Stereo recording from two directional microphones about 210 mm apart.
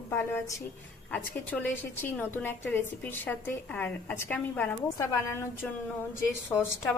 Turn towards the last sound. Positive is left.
turn(degrees=10)  # may be behind; listen again after turning